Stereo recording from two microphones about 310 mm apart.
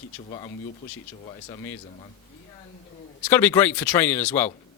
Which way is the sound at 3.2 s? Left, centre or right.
Centre.